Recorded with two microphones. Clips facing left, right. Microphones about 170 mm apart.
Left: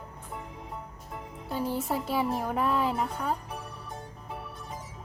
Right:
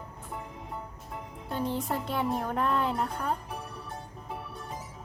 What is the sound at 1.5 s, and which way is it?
Speech, 5° left (ahead or behind).